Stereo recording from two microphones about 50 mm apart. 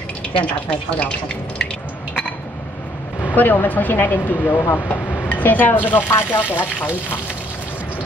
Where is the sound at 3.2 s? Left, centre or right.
Left.